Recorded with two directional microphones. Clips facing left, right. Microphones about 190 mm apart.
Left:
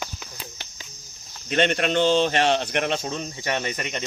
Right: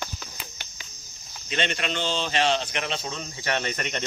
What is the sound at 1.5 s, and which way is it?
Speech, 55° left (ahead or behind).